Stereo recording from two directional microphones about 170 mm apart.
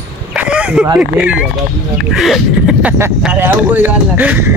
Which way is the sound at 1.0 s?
5° right (ahead or behind).